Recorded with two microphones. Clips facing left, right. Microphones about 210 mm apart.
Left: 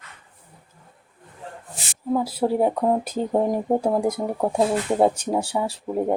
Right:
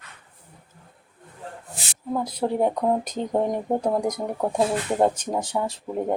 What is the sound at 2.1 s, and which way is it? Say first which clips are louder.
Speech: left 3 dB; 5° left (ahead or behind).